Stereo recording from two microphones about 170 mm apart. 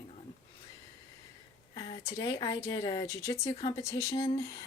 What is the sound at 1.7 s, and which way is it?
A woman's voice, 25° left (ahead or behind).